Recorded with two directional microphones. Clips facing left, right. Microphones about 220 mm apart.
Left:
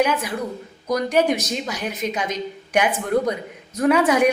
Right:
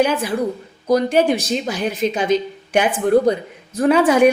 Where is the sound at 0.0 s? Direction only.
30° right (ahead or behind).